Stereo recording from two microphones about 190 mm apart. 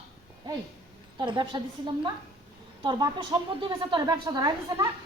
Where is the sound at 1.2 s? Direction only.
25° right (ahead or behind).